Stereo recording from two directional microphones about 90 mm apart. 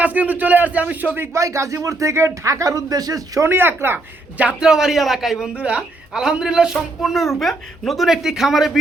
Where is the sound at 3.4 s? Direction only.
25° right (ahead or behind).